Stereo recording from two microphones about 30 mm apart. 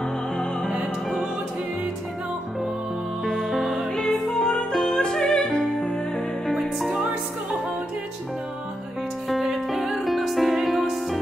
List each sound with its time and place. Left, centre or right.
3.7 s music: centre
6.4 s music: centre
9.3 s music: centre